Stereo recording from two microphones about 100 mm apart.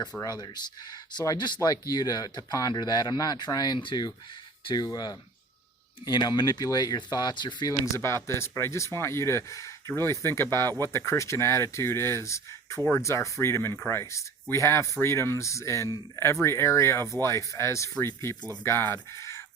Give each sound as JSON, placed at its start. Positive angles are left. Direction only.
{"t": 0.2, "sound": "speech", "side_deg": 40}
{"t": 7.9, "sound": "speech", "side_deg": 25}